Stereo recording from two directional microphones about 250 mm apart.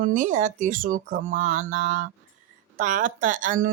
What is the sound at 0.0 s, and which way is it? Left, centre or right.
Speech, right.